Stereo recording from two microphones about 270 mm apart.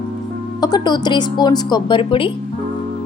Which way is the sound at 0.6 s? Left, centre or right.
Centre.